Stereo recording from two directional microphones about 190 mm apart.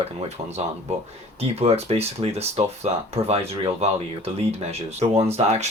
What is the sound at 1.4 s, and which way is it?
Speech, 30° right (ahead or behind).